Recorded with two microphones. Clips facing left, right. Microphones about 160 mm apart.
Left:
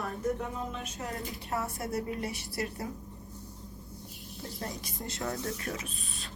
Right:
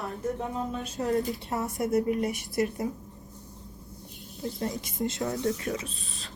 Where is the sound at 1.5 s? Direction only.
20° right (ahead or behind).